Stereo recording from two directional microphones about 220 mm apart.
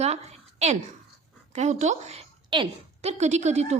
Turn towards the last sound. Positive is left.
turn(degrees=-30)  # may be behind; listen again after turning